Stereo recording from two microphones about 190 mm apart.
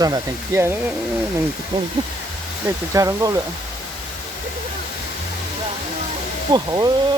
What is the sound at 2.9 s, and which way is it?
Speech, 15° right (ahead or behind).